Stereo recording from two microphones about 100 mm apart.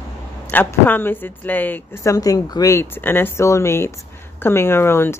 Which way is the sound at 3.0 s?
20° left (ahead or behind).